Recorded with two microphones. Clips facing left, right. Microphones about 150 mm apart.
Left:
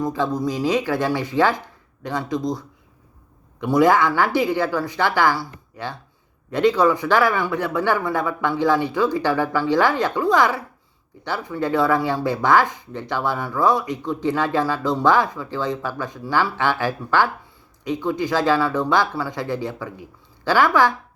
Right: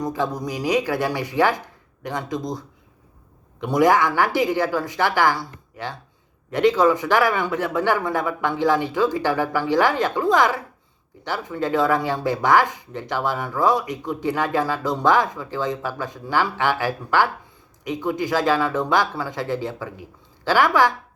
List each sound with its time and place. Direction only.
0.0 s a man's voice: 20° right (ahead or behind)
6.5 s a man's voice: 20° right (ahead or behind)